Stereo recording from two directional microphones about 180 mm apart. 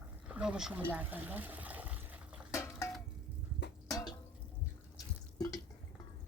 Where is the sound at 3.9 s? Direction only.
20° left (ahead or behind).